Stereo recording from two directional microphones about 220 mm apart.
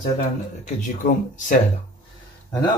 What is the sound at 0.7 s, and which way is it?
Speech, 35° left (ahead or behind).